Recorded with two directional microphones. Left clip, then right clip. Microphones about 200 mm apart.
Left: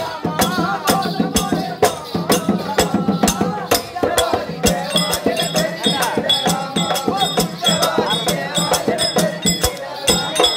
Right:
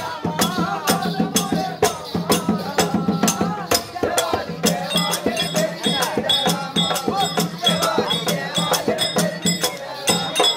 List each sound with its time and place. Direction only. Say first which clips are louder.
0.4 s music: left 4 dB; centre (ahead or behind)